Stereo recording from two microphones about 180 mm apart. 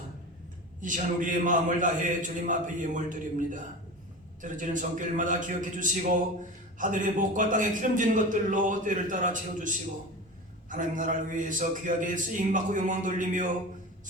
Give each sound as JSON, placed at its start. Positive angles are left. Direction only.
{"t": 0.8, "sound": "a man's voice", "side_deg": -45}